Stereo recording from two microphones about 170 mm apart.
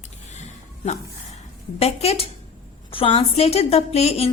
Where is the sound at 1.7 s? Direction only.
35° left (ahead or behind).